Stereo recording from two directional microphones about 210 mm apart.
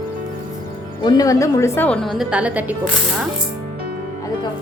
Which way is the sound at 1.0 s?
20° left (ahead or behind).